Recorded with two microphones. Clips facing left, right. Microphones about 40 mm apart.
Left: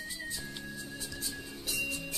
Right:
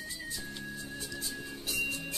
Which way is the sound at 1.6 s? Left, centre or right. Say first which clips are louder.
Right 1 dB; right.